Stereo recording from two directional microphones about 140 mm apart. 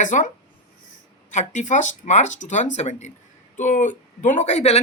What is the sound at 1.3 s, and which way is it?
Speech, 60° left (ahead or behind).